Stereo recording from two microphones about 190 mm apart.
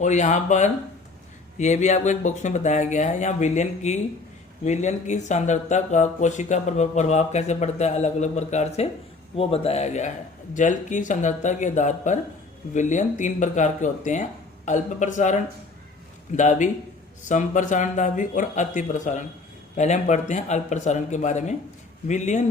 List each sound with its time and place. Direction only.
0.0 s speech: 40° left (ahead or behind)